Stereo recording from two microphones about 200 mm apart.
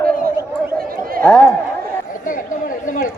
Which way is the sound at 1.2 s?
5° left (ahead or behind).